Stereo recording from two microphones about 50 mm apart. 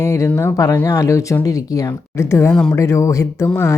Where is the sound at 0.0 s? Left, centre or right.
Left.